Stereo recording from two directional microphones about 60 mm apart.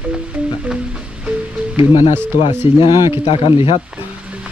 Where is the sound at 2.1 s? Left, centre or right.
Right.